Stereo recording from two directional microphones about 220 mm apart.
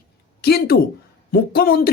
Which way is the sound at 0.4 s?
45° left (ahead or behind).